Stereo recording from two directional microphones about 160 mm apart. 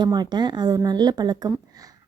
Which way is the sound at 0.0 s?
25° right (ahead or behind).